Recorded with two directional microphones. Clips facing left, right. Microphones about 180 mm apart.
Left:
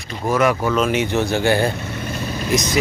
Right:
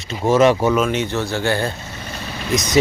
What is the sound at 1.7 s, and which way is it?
Vehicle, 60° left (ahead or behind).